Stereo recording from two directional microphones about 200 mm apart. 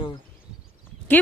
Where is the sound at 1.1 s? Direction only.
10° left (ahead or behind).